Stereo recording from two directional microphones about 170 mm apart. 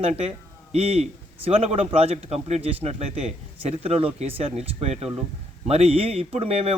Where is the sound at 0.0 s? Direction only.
40° right (ahead or behind).